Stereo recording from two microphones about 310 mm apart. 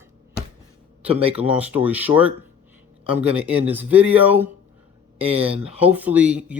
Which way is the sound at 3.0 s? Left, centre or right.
Centre.